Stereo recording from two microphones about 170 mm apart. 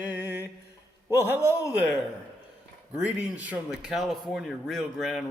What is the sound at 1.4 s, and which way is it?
Speech, 15° left (ahead or behind).